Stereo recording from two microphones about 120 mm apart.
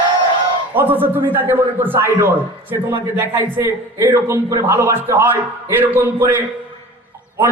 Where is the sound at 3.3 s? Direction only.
25° right (ahead or behind).